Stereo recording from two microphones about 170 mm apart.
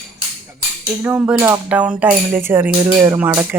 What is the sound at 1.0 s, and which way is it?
Music, 10° right (ahead or behind).